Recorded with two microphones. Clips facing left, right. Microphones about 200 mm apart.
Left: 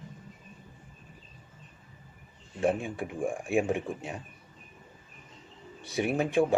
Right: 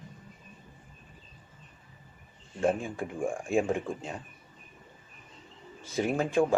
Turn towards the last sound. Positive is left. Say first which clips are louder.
# even
turn(degrees=15)  # may be behind; listen again after turning